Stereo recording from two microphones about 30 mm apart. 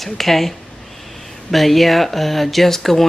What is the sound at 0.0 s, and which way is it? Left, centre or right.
Speech, centre.